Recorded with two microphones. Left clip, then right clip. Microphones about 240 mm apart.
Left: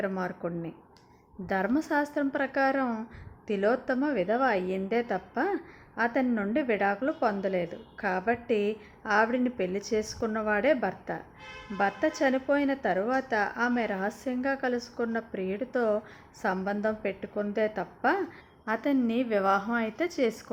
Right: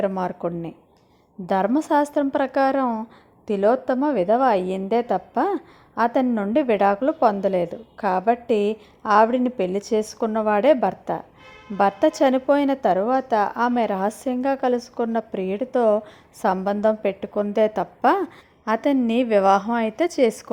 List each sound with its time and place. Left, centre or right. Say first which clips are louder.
0.0 s a woman's voice: right 8 dB; right